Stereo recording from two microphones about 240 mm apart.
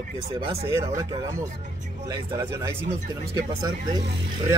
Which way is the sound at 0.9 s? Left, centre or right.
Centre.